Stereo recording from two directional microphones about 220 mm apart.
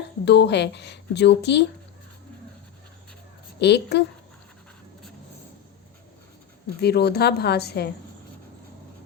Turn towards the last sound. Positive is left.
turn(degrees=50)  # may be behind; listen again after turning